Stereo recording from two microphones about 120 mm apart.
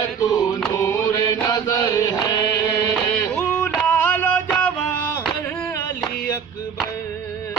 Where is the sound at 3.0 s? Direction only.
15° left (ahead or behind).